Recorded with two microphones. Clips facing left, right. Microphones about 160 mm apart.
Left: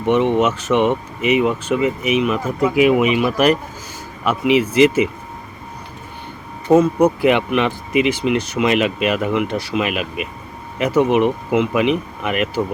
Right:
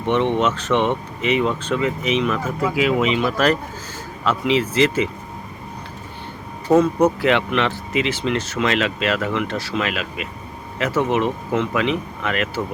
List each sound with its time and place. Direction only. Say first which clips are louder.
0.0 s speech: left 3 dB; 10° left (ahead or behind)
6.7 s speech: left 2 dB; 10° left (ahead or behind)